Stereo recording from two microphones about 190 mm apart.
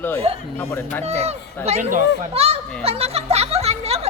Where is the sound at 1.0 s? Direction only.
35° right (ahead or behind).